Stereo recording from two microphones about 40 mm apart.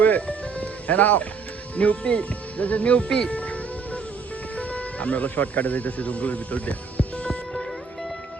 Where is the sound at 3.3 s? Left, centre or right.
Left.